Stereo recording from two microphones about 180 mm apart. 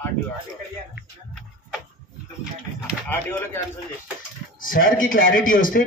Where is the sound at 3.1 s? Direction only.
10° left (ahead or behind).